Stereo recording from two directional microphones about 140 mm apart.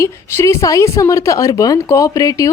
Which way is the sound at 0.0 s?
20° left (ahead or behind).